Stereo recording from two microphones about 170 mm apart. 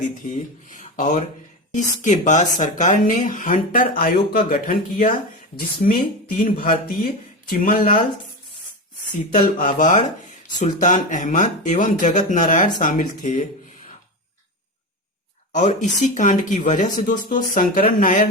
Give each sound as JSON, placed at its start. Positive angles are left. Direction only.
{"t": 0.3, "sound": "speech", "side_deg": 45}
{"t": 6.4, "sound": "speech", "side_deg": 55}
{"t": 9.3, "sound": "speech", "side_deg": 50}
{"t": 15.5, "sound": "speech", "side_deg": 45}